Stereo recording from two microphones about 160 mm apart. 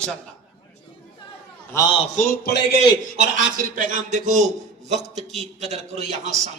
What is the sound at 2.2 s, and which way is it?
Speech, 75° left (ahead or behind).